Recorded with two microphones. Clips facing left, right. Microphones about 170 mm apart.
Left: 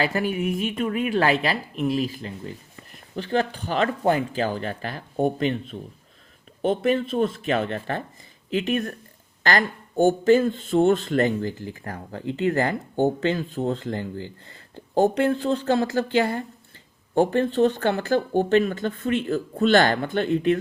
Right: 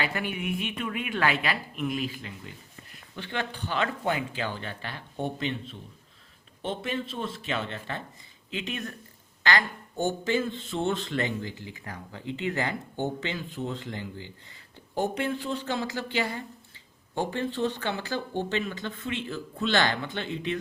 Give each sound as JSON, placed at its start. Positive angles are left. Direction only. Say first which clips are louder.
{"t": 0.0, "sound": "speech", "louder": "left 7 dB", "side_deg": 40}
{"t": 6.6, "sound": "speech", "louder": "left 10 dB", "side_deg": 50}